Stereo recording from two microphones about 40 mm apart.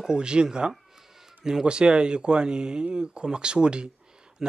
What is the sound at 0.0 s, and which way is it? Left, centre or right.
Speech, right.